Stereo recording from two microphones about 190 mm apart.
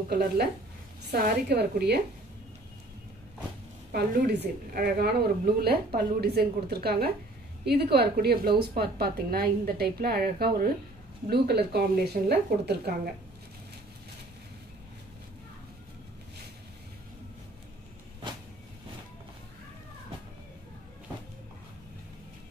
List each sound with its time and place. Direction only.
1.1 s a woman's voice: 55° right (ahead or behind)
3.9 s a woman's voice: 60° right (ahead or behind)